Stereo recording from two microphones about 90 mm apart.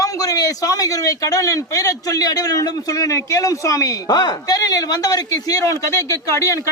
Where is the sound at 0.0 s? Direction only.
40° left (ahead or behind).